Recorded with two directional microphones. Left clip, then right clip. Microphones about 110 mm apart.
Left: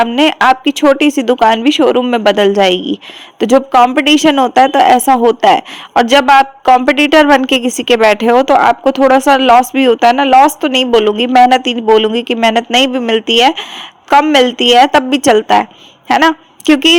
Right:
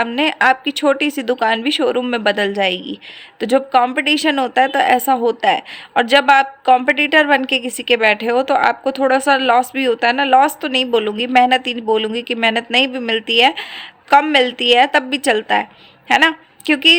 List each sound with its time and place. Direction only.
0.2 s speech: 40° left (ahead or behind)
2.6 s a woman's voice: 45° left (ahead or behind)
7.4 s a woman's voice: 50° left (ahead or behind)